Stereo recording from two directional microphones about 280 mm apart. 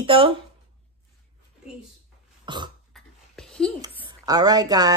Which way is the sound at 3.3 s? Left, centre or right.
Centre.